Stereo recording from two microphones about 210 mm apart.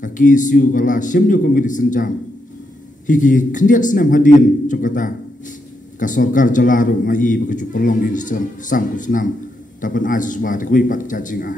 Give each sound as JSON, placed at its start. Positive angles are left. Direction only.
{"t": 0.0, "sound": "a man's voice", "side_deg": 40}